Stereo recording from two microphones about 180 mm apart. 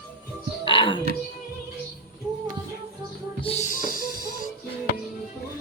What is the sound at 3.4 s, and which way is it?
Music, 40° left (ahead or behind).